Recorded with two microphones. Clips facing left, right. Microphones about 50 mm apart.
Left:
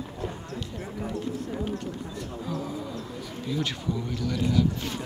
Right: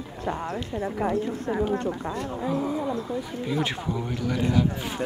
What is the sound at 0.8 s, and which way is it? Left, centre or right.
Speech, right.